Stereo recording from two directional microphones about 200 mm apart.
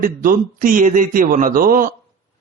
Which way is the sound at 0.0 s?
45° right (ahead or behind).